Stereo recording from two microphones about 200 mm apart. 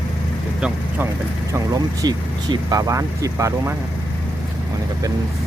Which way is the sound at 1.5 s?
20° right (ahead or behind).